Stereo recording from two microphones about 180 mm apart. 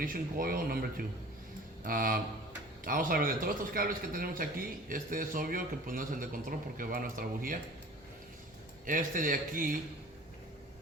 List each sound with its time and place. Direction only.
0.0 s a man's voice: 50° right (ahead or behind)
8.9 s a man's voice: 50° right (ahead or behind)